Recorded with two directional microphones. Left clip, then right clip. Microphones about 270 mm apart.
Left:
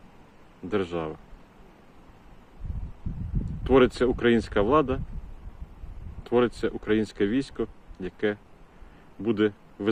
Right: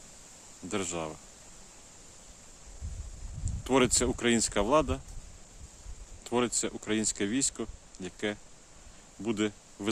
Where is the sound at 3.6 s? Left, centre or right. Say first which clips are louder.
Left 6 dB; centre.